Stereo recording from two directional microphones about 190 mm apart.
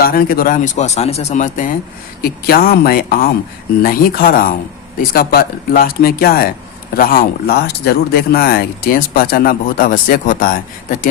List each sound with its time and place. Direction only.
0.0 s speech: 50° left (ahead or behind)
2.2 s speech: 55° left (ahead or behind)